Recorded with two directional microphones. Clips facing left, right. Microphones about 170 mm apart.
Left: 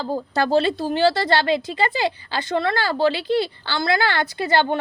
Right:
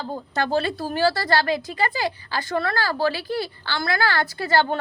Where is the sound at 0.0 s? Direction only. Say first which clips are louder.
Left 4 dB; 35° left (ahead or behind).